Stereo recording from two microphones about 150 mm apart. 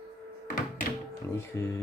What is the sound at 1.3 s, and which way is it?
Speech, 15° left (ahead or behind).